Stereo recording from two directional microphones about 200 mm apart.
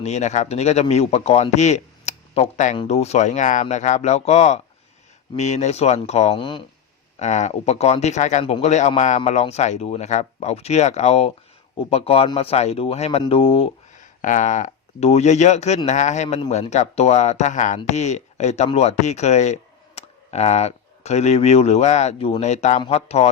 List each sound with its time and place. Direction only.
0.0 s speech: 35° left (ahead or behind)
7.2 s speech: 35° left (ahead or behind)
14.2 s speech: 40° left (ahead or behind)